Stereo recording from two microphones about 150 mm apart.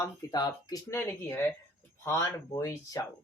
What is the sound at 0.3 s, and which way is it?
Speech, 25° left (ahead or behind).